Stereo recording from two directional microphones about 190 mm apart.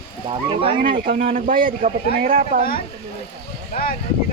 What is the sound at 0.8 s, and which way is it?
A man's voice, 50° right (ahead or behind).